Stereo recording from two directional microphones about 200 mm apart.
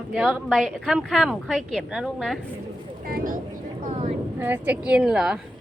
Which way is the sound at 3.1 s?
45° right (ahead or behind).